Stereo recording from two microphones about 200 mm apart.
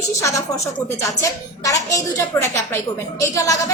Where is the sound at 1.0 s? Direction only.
15° left (ahead or behind).